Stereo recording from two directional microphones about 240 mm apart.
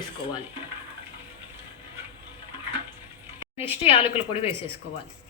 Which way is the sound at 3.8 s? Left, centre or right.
Left.